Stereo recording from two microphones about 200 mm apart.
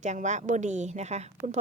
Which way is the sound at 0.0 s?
35° right (ahead or behind).